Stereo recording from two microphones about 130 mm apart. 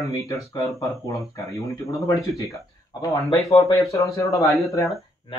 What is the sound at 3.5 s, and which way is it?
Speech, 50° left (ahead or behind).